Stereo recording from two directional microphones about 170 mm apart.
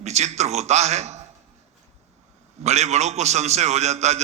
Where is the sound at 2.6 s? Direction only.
40° right (ahead or behind).